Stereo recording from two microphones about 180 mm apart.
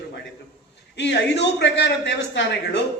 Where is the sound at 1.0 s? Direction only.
80° left.